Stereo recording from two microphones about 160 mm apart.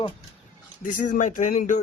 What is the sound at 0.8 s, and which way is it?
Speech, 55° left (ahead or behind).